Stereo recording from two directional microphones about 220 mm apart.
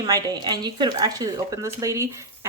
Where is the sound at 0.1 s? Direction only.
20° right (ahead or behind).